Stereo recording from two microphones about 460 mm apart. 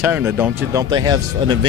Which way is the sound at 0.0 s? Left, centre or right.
Centre.